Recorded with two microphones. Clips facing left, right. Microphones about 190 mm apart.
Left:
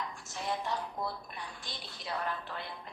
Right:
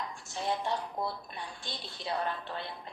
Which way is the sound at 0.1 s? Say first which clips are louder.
Right 3 dB; 30° right (ahead or behind).